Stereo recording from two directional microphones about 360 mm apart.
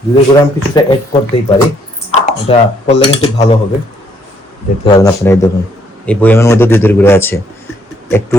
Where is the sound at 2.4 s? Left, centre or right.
Centre.